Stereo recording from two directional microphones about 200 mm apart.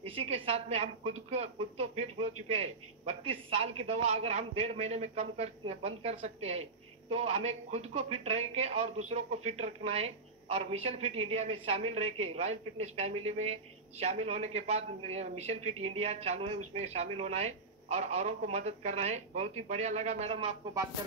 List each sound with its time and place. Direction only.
0.0 s a woman's voice: 30° right (ahead or behind)
11.1 s speech: 90° right
11.3 s a man's voice: 30° right (ahead or behind)